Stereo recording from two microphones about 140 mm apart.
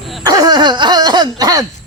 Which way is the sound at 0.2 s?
25° right (ahead or behind).